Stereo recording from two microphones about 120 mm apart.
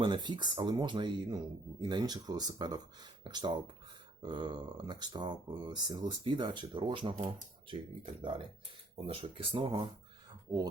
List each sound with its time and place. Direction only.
0.0 s speech: 40° right (ahead or behind)
10.5 s speech: 20° right (ahead or behind)